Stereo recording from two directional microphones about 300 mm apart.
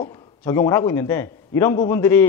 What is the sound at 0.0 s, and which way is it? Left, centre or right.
A man's voice, centre.